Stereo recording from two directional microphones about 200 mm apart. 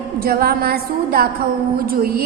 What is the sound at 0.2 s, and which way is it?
A woman's voice, 50° right (ahead or behind).